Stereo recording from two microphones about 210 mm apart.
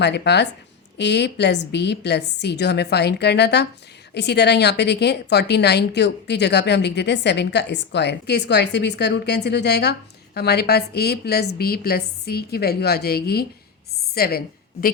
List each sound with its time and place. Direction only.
0.0 s a woman's voice: 55° left (ahead or behind)